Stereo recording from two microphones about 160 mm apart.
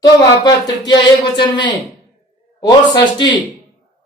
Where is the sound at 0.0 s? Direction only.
25° left (ahead or behind).